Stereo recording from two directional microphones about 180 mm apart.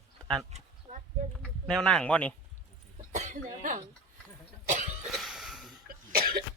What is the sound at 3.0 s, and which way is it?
Cough, 45° right (ahead or behind).